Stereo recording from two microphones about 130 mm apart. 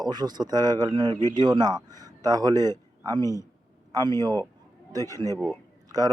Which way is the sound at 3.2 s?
25° left (ahead or behind).